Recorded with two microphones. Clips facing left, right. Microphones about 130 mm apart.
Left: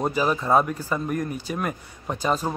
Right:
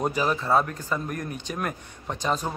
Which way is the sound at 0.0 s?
Centre (ahead or behind).